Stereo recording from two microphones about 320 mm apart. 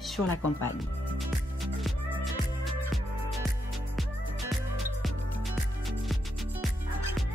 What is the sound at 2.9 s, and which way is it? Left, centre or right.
Music, centre.